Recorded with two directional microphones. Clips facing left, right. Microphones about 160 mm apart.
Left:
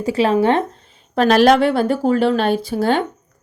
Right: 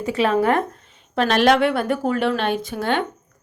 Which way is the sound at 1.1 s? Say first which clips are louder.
Left 4 dB; 40° left (ahead or behind).